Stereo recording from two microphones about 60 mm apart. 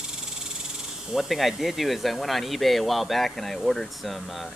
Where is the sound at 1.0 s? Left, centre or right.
Centre.